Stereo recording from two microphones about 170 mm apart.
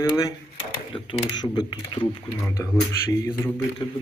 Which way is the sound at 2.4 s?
15° left (ahead or behind).